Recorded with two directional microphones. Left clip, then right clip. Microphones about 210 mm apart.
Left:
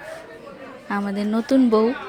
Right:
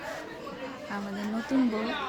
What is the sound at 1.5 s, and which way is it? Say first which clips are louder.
Speech: left 10 dB; 40° left (ahead or behind).